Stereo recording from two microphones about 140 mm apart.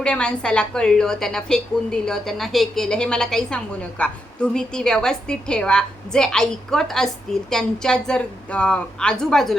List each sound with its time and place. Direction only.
0.0 s a woman's voice: 5° left (ahead or behind)